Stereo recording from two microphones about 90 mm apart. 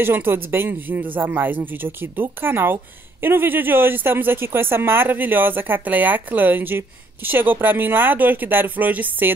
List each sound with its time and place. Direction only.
0.0 s speech: 25° right (ahead or behind)